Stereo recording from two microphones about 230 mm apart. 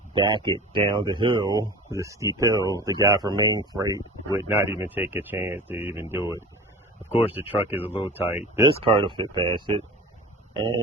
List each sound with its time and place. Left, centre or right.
0.1 s speech: right
8.6 s speech: right